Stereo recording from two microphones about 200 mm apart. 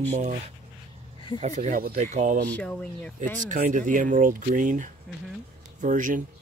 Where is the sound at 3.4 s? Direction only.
40° right (ahead or behind).